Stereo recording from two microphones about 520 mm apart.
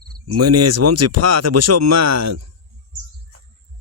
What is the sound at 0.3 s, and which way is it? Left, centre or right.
Speech, right.